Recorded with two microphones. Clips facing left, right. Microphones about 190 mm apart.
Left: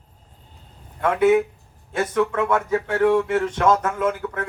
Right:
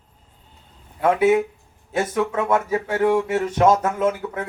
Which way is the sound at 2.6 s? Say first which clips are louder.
Left 1 dB; 10° right (ahead or behind).